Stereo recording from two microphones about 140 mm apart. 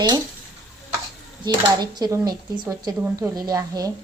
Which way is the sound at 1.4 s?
30° right (ahead or behind).